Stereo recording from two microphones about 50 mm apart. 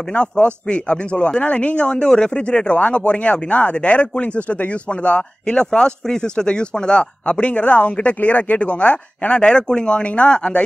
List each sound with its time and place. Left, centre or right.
0.1 s speech: left